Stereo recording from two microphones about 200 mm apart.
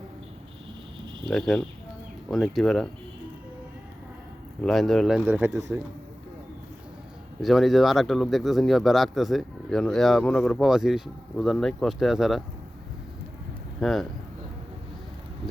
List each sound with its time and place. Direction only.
1.2 s speech: centre (ahead or behind)
4.6 s speech: centre (ahead or behind)
7.4 s speech: centre (ahead or behind)
13.7 s speech: centre (ahead or behind)